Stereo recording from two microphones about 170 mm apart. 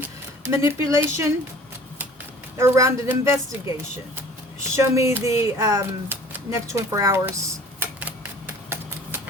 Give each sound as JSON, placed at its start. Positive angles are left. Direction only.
{"t": 0.5, "sound": "speech", "side_deg": -15}
{"t": 2.6, "sound": "speech", "side_deg": -15}